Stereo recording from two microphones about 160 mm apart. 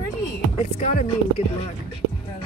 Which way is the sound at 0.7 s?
50° left (ahead or behind).